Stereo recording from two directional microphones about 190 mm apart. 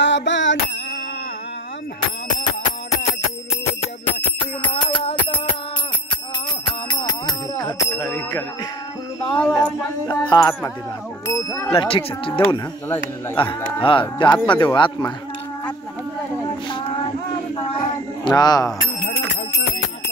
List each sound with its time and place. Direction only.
0.0 s music: 70° left (ahead or behind)
4.7 s bicycle bell: 25° left (ahead or behind)
6.9 s bicycle bell: 20° left (ahead or behind)
9.3 s speech: 5° left (ahead or behind)
10.0 s speech: 25° left (ahead or behind)
11.7 s speech: 30° left (ahead or behind)
17.6 s a sound: 25° left (ahead or behind)